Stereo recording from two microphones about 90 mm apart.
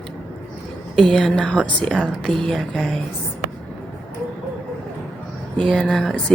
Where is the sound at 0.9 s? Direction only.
5° left (ahead or behind).